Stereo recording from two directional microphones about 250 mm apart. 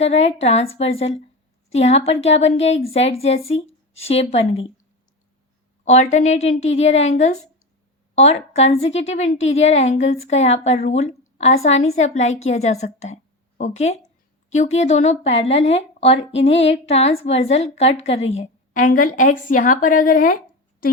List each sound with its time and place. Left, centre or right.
0.0 s a woman's voice: left
5.8 s a woman's voice: left